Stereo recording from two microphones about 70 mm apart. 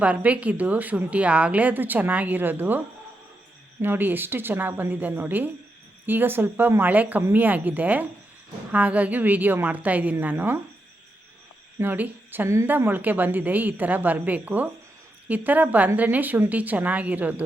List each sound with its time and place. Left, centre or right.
0.0 s a woman's voice: centre
11.8 s a woman's voice: right